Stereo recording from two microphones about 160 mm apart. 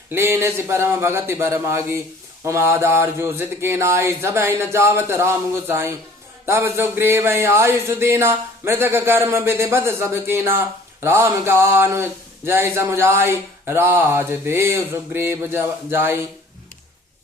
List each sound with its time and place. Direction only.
0.1 s speech: 15° right (ahead or behind)